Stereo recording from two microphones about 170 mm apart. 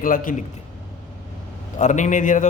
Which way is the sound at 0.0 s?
55° left (ahead or behind).